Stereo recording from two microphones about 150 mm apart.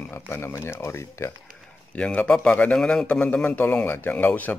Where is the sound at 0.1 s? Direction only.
15° left (ahead or behind).